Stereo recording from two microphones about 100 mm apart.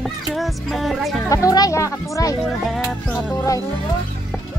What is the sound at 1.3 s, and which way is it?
Speech, 35° left (ahead or behind).